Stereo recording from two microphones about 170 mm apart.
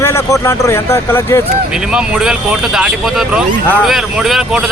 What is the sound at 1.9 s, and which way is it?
Speech, 5° right (ahead or behind).